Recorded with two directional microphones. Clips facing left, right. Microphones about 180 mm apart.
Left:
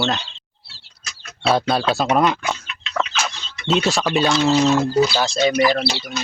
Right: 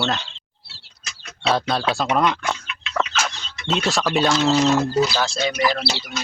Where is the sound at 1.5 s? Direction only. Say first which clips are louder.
Left 3 dB; 5° left (ahead or behind).